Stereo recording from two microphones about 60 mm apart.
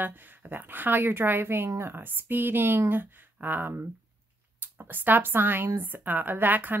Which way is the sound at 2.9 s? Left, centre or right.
Right.